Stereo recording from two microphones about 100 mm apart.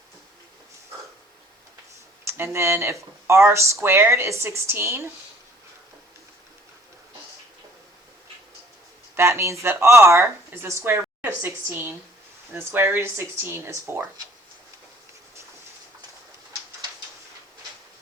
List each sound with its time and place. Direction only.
2.2 s speech: 25° right (ahead or behind)
9.1 s speech: 25° right (ahead or behind)